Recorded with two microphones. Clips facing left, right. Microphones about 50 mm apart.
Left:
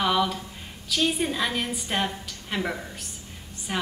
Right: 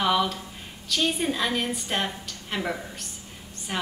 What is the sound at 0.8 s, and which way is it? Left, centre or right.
A woman's voice, centre.